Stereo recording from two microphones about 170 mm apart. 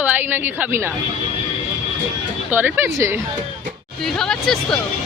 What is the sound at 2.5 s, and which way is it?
Speech, 10° right (ahead or behind).